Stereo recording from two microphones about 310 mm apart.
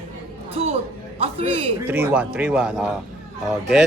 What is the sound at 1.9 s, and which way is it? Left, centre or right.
Speech, centre.